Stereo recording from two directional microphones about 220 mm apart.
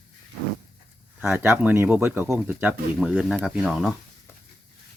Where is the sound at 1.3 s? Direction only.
10° right (ahead or behind).